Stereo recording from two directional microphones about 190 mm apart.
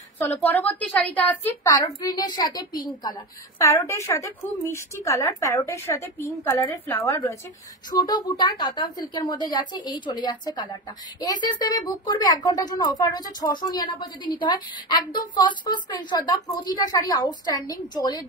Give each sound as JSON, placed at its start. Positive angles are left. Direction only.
{"t": 0.2, "sound": "a woman's voice", "side_deg": 10}